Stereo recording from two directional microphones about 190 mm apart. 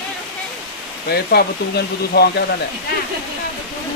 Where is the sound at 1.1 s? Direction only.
55° left (ahead or behind).